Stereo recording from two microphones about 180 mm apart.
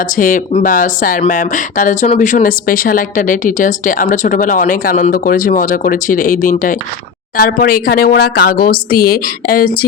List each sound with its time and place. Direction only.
0.0 s a woman's voice: 50° left (ahead or behind)